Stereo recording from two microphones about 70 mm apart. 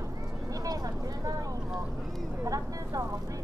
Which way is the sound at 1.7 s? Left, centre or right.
Centre.